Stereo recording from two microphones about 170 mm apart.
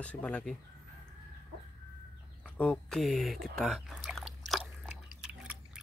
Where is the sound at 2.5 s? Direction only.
5° left (ahead or behind).